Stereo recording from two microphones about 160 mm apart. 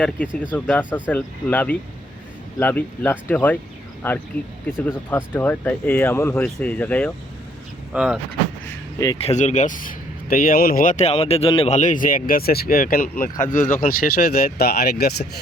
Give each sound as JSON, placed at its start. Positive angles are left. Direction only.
{"t": 0.5, "sound": "speech", "side_deg": 10}
{"t": 7.9, "sound": "speech", "side_deg": -5}
{"t": 9.2, "sound": "speech", "side_deg": 45}
{"t": 13.4, "sound": "speech", "side_deg": 55}
{"t": 13.8, "sound": "speech", "side_deg": 70}